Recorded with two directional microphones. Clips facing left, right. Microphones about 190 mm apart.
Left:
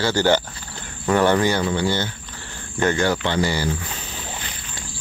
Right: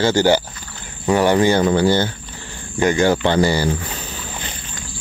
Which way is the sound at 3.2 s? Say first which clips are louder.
Right 6 dB; 40° right (ahead or behind).